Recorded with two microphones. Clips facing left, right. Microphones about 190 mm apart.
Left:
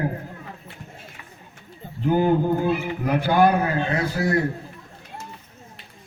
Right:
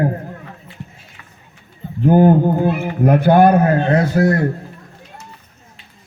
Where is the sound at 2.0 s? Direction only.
50° right (ahead or behind).